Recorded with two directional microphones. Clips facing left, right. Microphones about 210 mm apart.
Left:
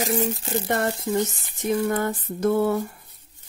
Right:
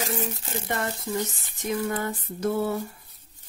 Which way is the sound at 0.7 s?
55° left (ahead or behind).